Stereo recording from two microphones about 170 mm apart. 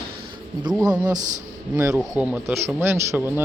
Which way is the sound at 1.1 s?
45° right (ahead or behind).